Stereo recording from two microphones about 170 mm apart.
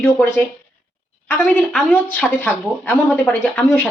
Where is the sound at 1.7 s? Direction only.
10° left (ahead or behind).